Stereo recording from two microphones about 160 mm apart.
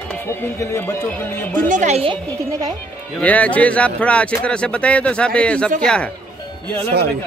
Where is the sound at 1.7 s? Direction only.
50° right (ahead or behind).